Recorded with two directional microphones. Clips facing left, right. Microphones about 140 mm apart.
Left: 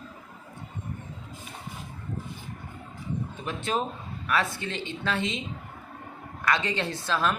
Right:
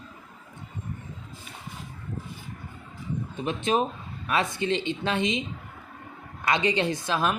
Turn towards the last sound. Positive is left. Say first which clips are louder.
# right 1 dB
turn(degrees=-15)  # may be behind; listen again after turning